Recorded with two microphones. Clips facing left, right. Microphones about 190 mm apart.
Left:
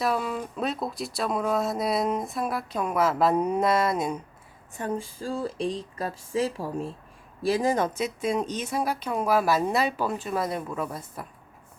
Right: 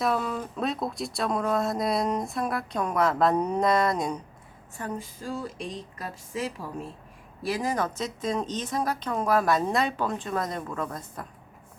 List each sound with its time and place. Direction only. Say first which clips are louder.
0.0 s speech: even; 5° left (ahead or behind)
4.8 s speech: left 4 dB; 30° left (ahead or behind)
7.9 s speech: left 2 dB; 10° left (ahead or behind)